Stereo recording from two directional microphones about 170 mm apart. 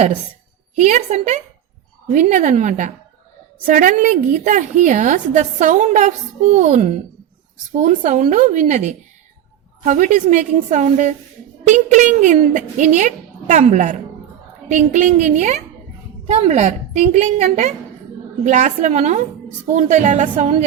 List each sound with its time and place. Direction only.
0.8 s a woman's voice: 45° right (ahead or behind)